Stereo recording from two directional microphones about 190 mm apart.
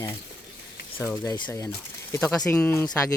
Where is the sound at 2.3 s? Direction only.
5° left (ahead or behind).